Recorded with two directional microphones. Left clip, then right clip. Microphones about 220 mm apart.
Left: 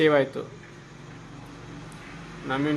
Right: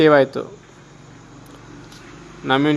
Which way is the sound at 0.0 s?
35° right (ahead or behind).